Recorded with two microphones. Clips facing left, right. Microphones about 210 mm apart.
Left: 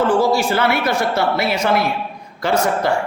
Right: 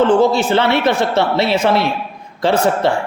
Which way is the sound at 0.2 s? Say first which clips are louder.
Right 3 dB; 25° right (ahead or behind).